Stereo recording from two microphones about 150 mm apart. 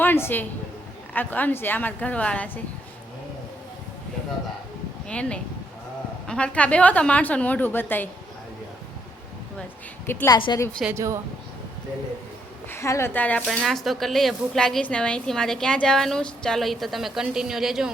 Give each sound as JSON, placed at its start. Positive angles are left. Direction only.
{"t": 0.0, "sound": "a woman's voice", "side_deg": 15}
{"t": 5.0, "sound": "a woman's voice", "side_deg": 5}
{"t": 10.2, "sound": "a woman's voice", "side_deg": 30}
{"t": 10.8, "sound": "speech", "side_deg": -20}
{"t": 12.7, "sound": "a woman's voice", "side_deg": 20}